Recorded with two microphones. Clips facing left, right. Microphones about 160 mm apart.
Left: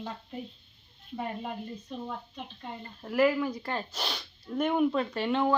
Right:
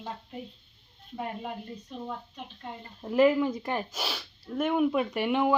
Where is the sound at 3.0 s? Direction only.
20° right (ahead or behind).